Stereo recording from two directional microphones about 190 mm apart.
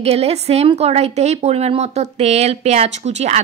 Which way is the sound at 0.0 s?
35° right (ahead or behind).